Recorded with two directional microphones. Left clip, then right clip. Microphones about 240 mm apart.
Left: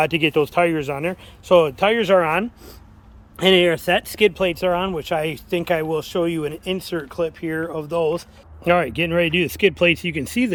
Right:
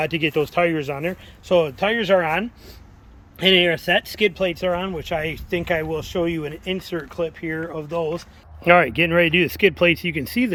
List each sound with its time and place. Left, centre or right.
0.0 s speech: centre